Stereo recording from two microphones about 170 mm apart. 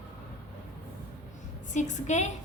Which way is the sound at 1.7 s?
45° left (ahead or behind).